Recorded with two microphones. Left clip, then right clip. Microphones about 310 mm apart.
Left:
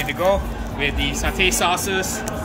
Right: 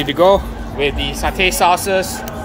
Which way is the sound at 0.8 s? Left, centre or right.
Centre.